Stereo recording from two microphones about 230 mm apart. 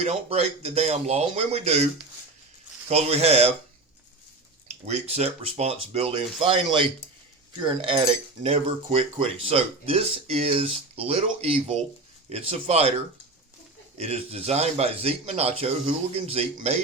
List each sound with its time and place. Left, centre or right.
0.0 s speech: right
2.9 s speech: right
4.9 s speech: right
14.0 s speech: right